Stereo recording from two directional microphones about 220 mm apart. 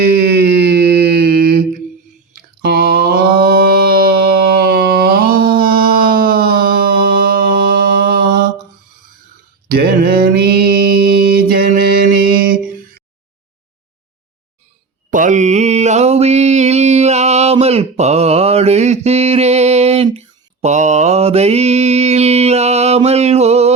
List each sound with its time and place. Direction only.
0.0 s a sound: 50° right (ahead or behind)
9.6 s mantra: 45° right (ahead or behind)
15.1 s mantra: 35° right (ahead or behind)